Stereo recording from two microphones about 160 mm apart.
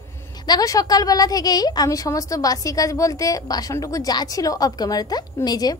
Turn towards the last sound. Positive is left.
turn(degrees=25)  # may be behind; listen again after turning